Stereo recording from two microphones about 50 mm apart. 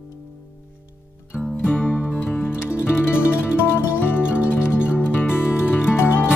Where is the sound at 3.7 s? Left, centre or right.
Left.